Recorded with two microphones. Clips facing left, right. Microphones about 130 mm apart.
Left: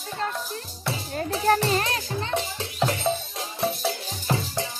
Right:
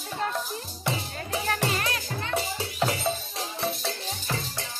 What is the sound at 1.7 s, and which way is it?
Music, 30° left (ahead or behind).